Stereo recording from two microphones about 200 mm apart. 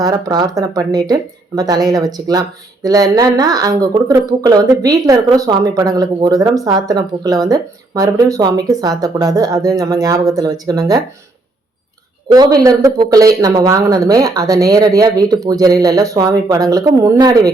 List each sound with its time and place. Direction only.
0.0 s speech: 20° right (ahead or behind)
12.3 s speech: 20° right (ahead or behind)